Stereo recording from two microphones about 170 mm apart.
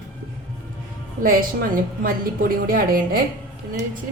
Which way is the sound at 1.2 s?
55° right (ahead or behind).